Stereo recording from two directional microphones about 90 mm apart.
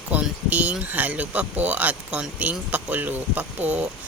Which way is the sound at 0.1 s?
20° right (ahead or behind).